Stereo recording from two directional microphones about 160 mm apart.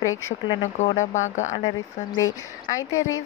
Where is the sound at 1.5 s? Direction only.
30° left (ahead or behind).